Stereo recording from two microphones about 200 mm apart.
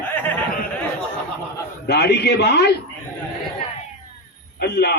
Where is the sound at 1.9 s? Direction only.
55° left (ahead or behind).